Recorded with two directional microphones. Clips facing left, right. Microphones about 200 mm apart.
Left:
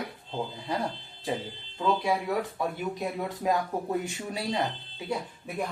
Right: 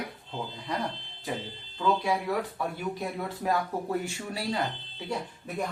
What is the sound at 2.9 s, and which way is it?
Speech, 20° left (ahead or behind).